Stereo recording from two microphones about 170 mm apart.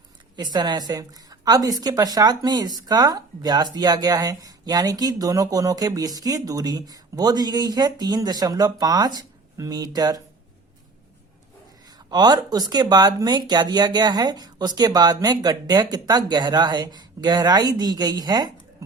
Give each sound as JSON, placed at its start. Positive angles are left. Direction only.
{"t": 0.3, "sound": "a woman's voice", "side_deg": -25}
{"t": 11.9, "sound": "a woman's voice", "side_deg": -25}